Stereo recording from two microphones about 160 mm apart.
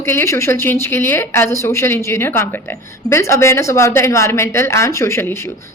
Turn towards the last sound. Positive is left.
turn(degrees=15)  # may be behind; listen again after turning